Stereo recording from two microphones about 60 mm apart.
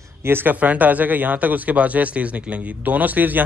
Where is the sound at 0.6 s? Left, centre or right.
Right.